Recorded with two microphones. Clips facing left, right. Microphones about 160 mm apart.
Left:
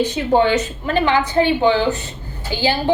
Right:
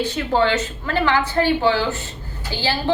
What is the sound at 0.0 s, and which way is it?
A woman's voice, 20° left (ahead or behind).